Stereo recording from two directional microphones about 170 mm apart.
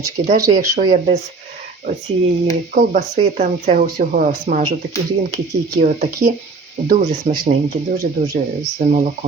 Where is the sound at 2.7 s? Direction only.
40° right (ahead or behind).